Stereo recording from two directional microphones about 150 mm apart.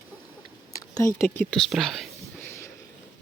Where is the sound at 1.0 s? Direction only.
20° left (ahead or behind).